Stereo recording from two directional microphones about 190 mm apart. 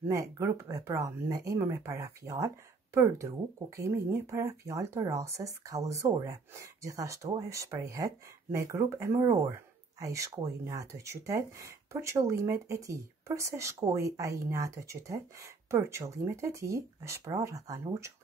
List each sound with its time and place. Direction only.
0.1 s speech: 15° right (ahead or behind)